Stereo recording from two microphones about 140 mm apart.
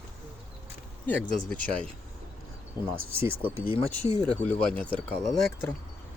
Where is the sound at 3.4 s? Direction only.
40° left (ahead or behind).